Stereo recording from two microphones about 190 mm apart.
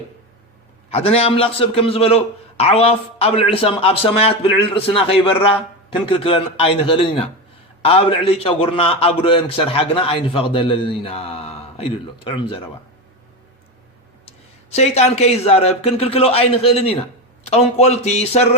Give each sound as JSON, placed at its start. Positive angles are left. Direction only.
{"t": 0.9, "sound": "a man's voice", "side_deg": 30}
{"t": 14.3, "sound": "a man's voice", "side_deg": 35}